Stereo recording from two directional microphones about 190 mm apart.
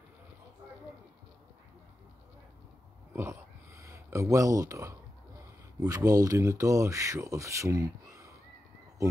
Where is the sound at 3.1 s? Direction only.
15° right (ahead or behind).